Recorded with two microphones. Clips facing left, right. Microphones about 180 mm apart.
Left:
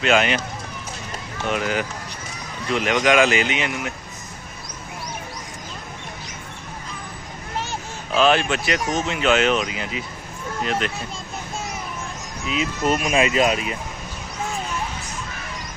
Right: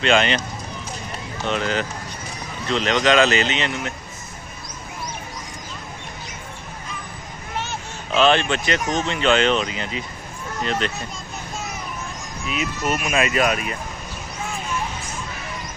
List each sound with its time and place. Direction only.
0.0 s speech: 5° left (ahead or behind)
1.5 s speech: 10° left (ahead or behind)
8.1 s speech: 5° left (ahead or behind)
12.4 s speech: 25° left (ahead or behind)